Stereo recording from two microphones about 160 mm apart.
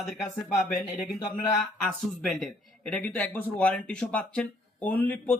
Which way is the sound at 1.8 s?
Centre (ahead or behind).